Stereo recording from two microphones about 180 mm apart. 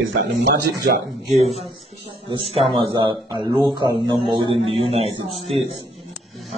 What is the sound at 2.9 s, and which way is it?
A man's voice, 25° right (ahead or behind).